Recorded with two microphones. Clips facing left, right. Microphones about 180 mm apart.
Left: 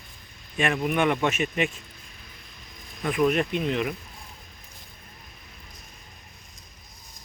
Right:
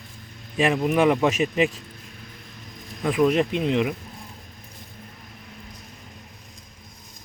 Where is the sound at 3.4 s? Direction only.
25° right (ahead or behind).